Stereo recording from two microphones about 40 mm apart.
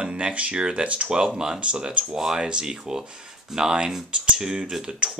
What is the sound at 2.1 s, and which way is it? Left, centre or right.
Speech, centre.